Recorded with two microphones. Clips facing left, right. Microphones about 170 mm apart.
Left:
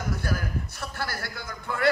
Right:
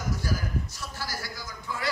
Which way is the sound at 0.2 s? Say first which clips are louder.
Left 1 dB; 60° left (ahead or behind).